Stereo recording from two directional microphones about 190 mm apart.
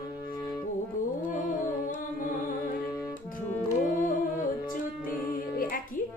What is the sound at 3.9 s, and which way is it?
Music, 45° left (ahead or behind).